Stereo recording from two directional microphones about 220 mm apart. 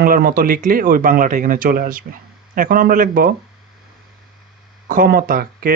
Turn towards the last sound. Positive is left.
turn(degrees=-40)  # may be behind; listen again after turning